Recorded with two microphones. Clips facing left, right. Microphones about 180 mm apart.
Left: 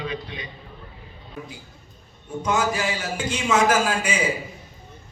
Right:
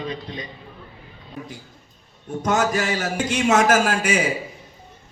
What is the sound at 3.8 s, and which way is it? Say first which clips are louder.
Speech: right 3 dB; 85° right.